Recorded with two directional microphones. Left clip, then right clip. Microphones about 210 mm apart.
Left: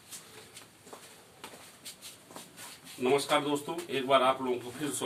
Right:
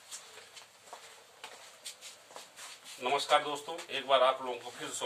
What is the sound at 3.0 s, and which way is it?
Speech, 5° right (ahead or behind).